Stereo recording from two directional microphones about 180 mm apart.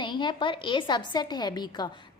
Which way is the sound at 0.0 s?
25° left (ahead or behind).